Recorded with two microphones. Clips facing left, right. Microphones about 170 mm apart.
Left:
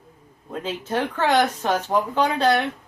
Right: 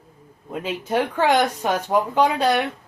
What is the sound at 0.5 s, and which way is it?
Speech, 10° right (ahead or behind).